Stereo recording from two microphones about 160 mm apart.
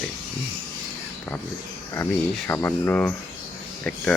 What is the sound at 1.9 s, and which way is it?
Speech, 15° left (ahead or behind).